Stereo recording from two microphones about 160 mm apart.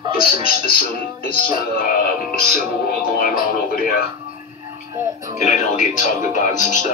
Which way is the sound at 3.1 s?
65° left (ahead or behind).